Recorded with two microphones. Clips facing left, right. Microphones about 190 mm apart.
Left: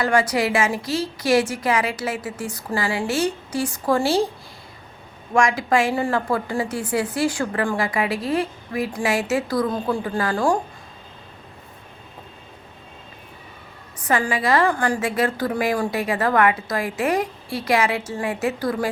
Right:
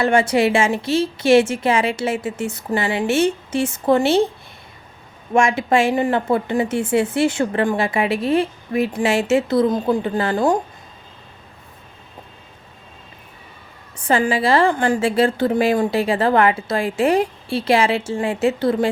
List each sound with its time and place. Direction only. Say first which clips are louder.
0.0 s a woman's voice: right 4 dB; 25° right (ahead or behind)
5.3 s a woman's voice: right 2 dB; 25° right (ahead or behind)
14.0 s a woman's voice: right 4 dB; 25° right (ahead or behind)